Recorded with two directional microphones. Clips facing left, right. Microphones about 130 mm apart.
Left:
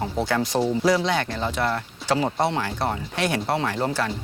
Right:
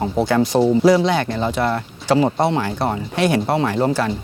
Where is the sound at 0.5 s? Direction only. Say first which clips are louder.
Right 7 dB; 45° right (ahead or behind).